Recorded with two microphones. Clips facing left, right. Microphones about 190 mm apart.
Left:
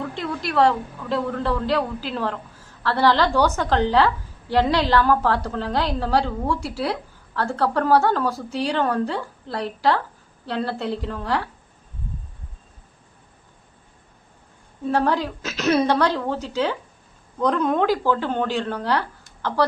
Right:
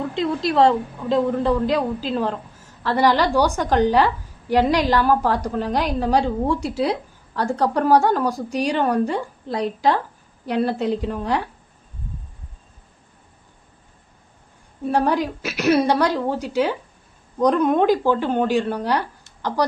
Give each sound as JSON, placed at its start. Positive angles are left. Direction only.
{"t": 0.2, "sound": "a woman's voice", "side_deg": -20}
{"t": 14.8, "sound": "a woman's voice", "side_deg": -15}